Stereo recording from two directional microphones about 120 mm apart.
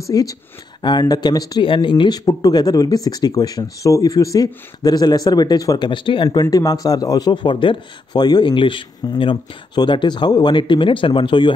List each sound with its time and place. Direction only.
0.0 s a man's voice: 30° left (ahead or behind)
1.7 s a man's voice: 45° left (ahead or behind)
6.5 s a man's voice: 30° left (ahead or behind)